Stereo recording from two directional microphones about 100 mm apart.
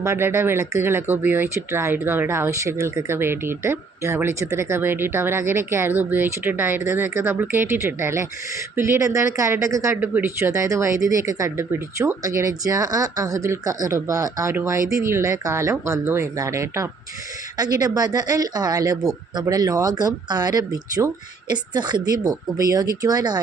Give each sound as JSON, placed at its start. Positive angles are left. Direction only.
{"t": 0.0, "sound": "speech", "side_deg": -25}